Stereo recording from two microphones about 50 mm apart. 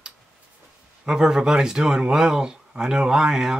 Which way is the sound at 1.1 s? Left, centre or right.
Centre.